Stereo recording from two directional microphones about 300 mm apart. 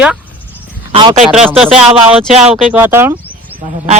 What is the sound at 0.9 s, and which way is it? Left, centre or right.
Speech, centre.